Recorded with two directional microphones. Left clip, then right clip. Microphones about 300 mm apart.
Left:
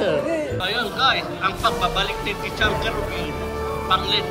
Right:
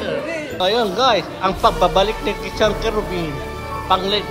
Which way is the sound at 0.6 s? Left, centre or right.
Centre.